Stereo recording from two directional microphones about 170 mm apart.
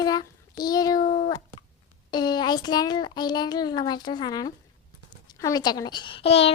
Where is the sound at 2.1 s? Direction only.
25° left (ahead or behind).